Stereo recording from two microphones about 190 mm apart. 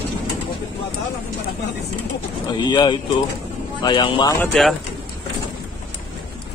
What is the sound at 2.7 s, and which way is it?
Speech, 25° left (ahead or behind).